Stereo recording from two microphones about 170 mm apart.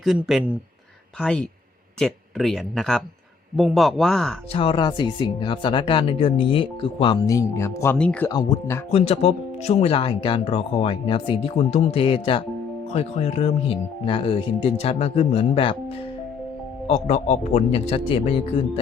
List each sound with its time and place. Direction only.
0.0 s speech: centre (ahead or behind)
4.5 s speech: 30° left (ahead or behind)
7.3 s speech: 15° left (ahead or behind)
8.3 s speech: 20° left (ahead or behind)
8.9 s speech: 35° left (ahead or behind)
16.8 s speech: 40° left (ahead or behind)